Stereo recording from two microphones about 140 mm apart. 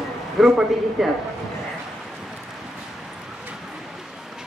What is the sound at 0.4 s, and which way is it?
Speech, 5° right (ahead or behind).